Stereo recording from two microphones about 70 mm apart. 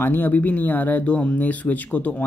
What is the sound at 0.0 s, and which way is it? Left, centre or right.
Speech, left.